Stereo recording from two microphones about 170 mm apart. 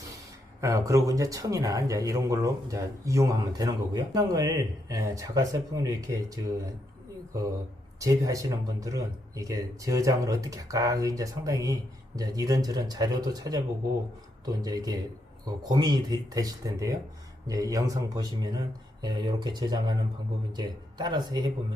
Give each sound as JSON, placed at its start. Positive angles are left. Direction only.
{"t": 0.6, "sound": "speech", "side_deg": -20}
{"t": 7.9, "sound": "speech", "side_deg": -20}